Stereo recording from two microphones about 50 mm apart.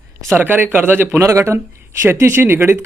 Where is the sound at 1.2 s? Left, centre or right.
Right.